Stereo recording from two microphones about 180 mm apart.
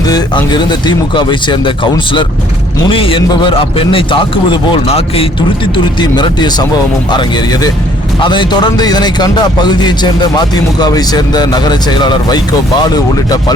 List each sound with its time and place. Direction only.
0.0 s speech: 20° left (ahead or behind)